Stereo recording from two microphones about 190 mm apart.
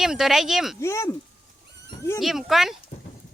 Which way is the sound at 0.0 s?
Centre (ahead or behind).